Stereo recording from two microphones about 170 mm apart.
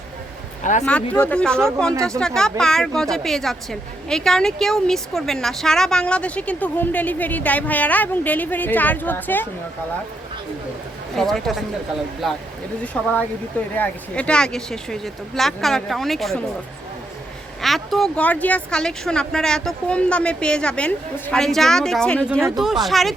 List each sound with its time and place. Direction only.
0.6 s speech: 45° left (ahead or behind)
0.9 s speech: 5° left (ahead or behind)
11.2 s speech: centre (ahead or behind)
17.6 s speech: centre (ahead or behind)